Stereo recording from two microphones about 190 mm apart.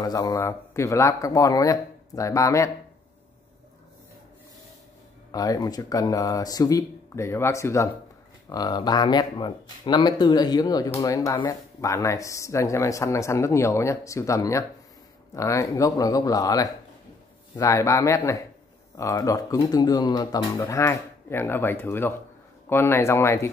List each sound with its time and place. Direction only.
0.0 s speech: 20° left (ahead or behind)
5.3 s speech: 20° left (ahead or behind)